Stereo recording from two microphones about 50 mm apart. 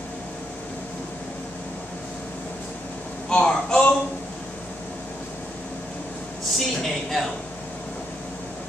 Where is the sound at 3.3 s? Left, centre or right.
Centre.